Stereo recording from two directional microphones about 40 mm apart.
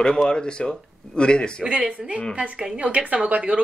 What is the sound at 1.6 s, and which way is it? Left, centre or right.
A woman's voice, right.